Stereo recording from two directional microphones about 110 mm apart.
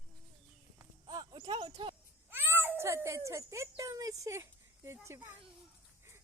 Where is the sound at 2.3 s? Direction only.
20° right (ahead or behind).